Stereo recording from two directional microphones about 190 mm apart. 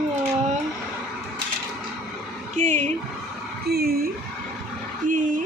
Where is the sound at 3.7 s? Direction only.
55° right (ahead or behind).